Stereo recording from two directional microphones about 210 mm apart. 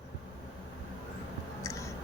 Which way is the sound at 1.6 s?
15° left (ahead or behind).